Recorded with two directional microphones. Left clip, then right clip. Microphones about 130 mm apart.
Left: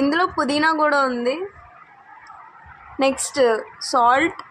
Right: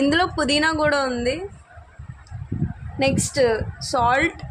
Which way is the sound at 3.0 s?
Centre (ahead or behind).